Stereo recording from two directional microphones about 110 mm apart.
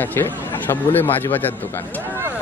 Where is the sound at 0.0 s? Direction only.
20° left (ahead or behind).